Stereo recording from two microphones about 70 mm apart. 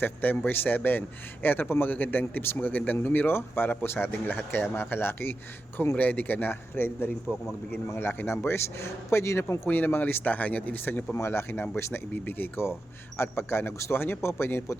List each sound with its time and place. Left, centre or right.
0.0 s a man's voice: left
7.3 s a man's voice: centre
7.9 s a man's voice: left
9.6 s speech: left
11.1 s a man's voice: left